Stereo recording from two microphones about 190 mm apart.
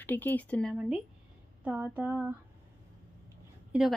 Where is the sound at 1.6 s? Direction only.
10° right (ahead or behind).